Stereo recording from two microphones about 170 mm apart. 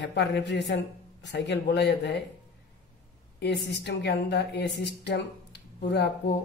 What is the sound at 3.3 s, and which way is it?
A woman's voice, 80° left.